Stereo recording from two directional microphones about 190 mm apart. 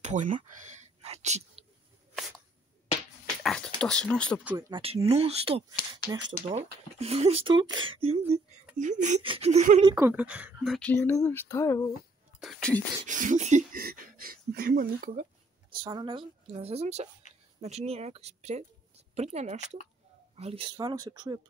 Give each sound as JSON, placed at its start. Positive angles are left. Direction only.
{"t": 0.0, "sound": "speech", "side_deg": -40}
{"t": 1.0, "sound": "whispering", "side_deg": -35}
{"t": 3.4, "sound": "speech", "side_deg": 5}
{"t": 4.5, "sound": "speech", "side_deg": -20}
{"t": 6.1, "sound": "speech", "side_deg": -20}
{"t": 7.0, "sound": "speech", "side_deg": -35}
{"t": 8.7, "sound": "speech", "side_deg": -40}
{"t": 9.2, "sound": "speech", "side_deg": -30}
{"t": 9.8, "sound": "speech", "side_deg": -15}
{"t": 12.4, "sound": "whispering", "side_deg": 0}
{"t": 13.0, "sound": "speech", "side_deg": -40}
{"t": 15.8, "sound": "a woman's voice", "side_deg": -25}